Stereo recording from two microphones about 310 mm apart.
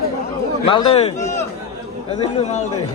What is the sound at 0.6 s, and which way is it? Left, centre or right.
A man's voice, centre.